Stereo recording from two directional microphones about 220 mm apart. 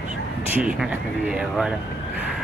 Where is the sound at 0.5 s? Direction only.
5° right (ahead or behind).